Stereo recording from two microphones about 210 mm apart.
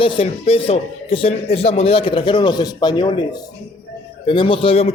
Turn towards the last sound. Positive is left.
turn(degrees=25)  # may be behind; listen again after turning